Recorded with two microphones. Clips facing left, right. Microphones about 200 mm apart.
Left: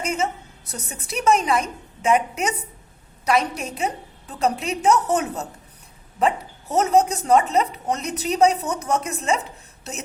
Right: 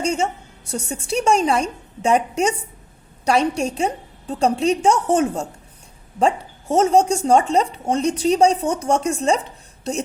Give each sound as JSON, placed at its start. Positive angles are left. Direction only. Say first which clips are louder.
{"t": 0.0, "sound": "a woman's voice", "louder": "right 3 dB", "side_deg": -30}